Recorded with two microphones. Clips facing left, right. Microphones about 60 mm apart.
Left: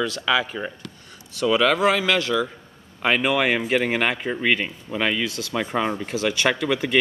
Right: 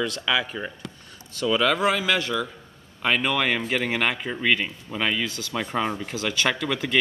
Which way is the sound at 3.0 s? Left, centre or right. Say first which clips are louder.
Left 3 dB; centre.